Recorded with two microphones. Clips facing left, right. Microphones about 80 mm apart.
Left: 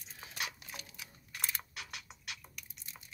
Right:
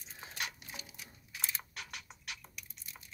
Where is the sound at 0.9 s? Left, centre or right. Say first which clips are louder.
Left 1 dB; left.